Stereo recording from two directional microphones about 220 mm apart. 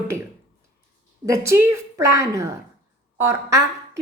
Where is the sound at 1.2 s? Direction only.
15° right (ahead or behind).